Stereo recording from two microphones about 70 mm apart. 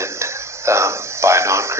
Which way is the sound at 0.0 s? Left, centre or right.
Right.